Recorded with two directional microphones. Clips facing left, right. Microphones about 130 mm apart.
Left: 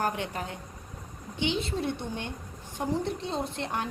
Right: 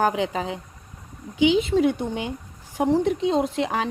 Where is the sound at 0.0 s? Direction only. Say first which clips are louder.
Right 8 dB; 90° right.